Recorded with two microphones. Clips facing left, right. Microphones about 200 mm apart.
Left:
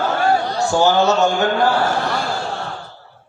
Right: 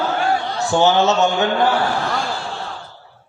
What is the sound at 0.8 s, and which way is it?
Speech, 20° right (ahead or behind).